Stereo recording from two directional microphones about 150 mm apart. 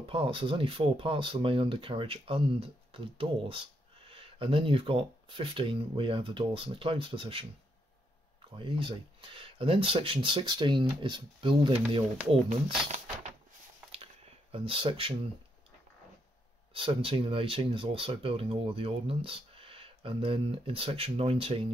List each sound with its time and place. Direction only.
0.0 s speech: 40° right (ahead or behind)
8.5 s speech: 35° right (ahead or behind)
14.5 s speech: 40° right (ahead or behind)
16.7 s speech: 40° right (ahead or behind)